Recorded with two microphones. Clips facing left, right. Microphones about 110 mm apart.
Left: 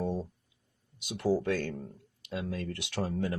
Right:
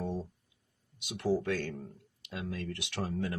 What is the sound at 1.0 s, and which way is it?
Speech, 30° left (ahead or behind).